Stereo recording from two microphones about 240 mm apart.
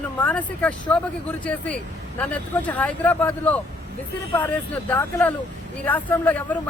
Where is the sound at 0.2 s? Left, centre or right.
Centre.